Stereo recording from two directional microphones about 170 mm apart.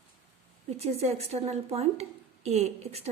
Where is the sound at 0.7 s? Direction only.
40° right (ahead or behind).